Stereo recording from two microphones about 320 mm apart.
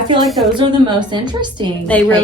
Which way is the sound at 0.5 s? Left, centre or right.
Centre.